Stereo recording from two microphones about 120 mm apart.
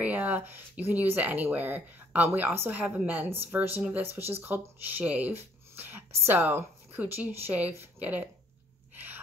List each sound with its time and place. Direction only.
0.0 s speech: 15° right (ahead or behind)
8.9 s gasp: 15° right (ahead or behind)